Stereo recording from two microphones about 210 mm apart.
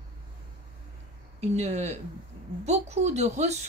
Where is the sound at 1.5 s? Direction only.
30° right (ahead or behind).